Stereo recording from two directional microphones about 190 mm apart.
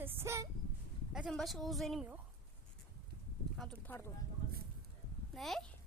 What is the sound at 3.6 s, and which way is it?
Speech, 5° left (ahead or behind).